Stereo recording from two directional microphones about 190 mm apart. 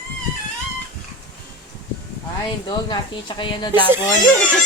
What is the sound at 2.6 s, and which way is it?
Speech, 25° left (ahead or behind).